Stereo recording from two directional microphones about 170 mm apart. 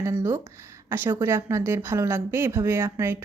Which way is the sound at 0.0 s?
15° right (ahead or behind).